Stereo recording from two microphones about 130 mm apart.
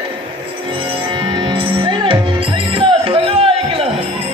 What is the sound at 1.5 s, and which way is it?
Music, 40° right (ahead or behind).